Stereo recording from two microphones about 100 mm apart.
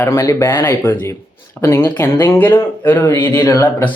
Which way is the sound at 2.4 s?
20° left (ahead or behind).